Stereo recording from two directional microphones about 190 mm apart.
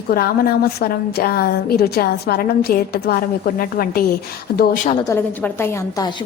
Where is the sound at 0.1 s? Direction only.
55° left (ahead or behind).